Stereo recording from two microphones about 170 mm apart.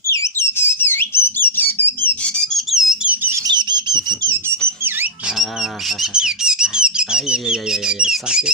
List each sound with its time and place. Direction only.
0.1 s whistle: 15° left (ahead or behind)
2.2 s a sound: 5° left (ahead or behind); by 4.5 s 20° right (ahead or behind)
6.0 s speech: 5° right (ahead or behind)